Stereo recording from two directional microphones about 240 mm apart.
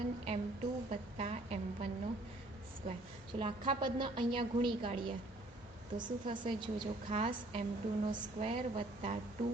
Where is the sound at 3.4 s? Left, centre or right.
Right.